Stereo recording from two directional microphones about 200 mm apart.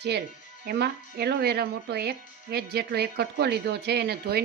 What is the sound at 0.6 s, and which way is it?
Speech, 50° right (ahead or behind).